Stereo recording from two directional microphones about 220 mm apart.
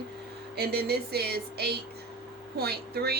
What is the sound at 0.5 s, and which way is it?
Speech, 45° right (ahead or behind).